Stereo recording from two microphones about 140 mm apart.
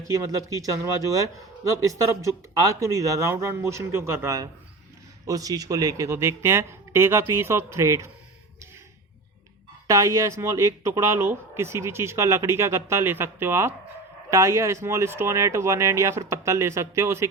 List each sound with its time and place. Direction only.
0.1 s a man's voice: 25° right (ahead or behind)
9.8 s a man's voice: 25° right (ahead or behind)